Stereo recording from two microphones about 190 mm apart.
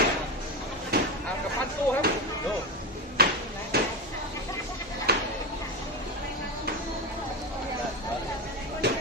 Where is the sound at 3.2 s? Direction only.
55° right (ahead or behind).